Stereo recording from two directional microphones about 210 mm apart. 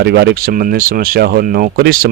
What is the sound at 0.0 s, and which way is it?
Speech, 50° right (ahead or behind).